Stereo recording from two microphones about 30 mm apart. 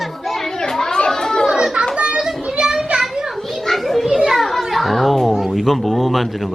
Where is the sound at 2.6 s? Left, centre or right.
Centre.